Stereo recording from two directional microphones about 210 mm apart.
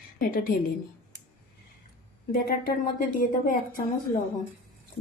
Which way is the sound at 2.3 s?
40° left (ahead or behind).